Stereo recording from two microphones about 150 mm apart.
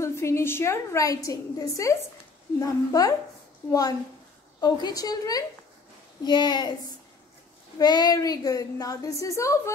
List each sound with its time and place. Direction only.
0.0 s a woman's voice: 20° left (ahead or behind)
4.6 s a woman's voice: 25° left (ahead or behind)
7.8 s a woman's voice: 25° left (ahead or behind)